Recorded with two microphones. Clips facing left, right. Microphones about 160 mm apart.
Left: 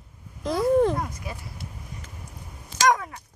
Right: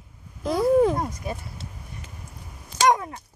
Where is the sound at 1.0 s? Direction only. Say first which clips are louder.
Right 3 dB; 25° right (ahead or behind).